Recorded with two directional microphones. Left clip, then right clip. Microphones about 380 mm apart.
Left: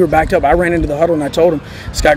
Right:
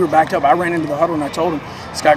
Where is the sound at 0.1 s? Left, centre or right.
Left.